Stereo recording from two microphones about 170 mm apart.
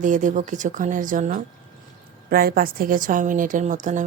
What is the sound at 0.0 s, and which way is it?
A woman's voice, 50° right (ahead or behind).